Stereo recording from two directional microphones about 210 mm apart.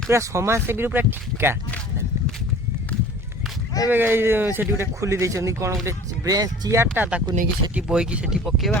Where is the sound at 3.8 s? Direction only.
10° right (ahead or behind).